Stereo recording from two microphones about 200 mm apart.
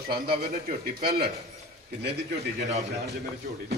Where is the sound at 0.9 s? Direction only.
50° right (ahead or behind).